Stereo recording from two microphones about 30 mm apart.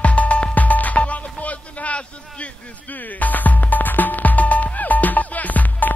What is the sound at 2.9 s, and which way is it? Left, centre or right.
Music, left.